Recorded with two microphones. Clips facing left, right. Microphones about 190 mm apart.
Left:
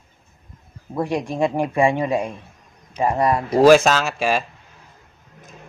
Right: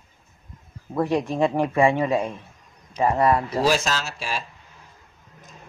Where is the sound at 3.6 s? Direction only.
55° left (ahead or behind).